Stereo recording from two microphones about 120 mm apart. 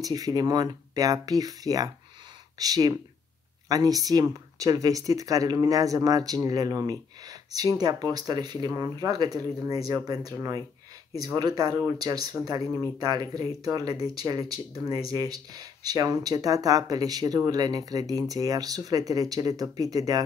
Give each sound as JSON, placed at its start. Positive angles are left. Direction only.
{"t": 0.0, "sound": "speech", "side_deg": -30}